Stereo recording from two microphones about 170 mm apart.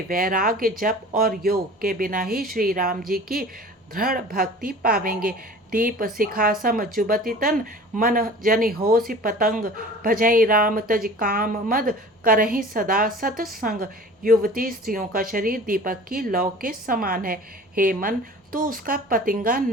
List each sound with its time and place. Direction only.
0.1 s speech: 55° right (ahead or behind)